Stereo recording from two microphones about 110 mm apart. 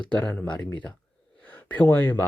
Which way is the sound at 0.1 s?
15° left (ahead or behind).